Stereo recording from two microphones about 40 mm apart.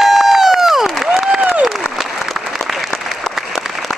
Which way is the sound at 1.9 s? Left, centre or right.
Centre.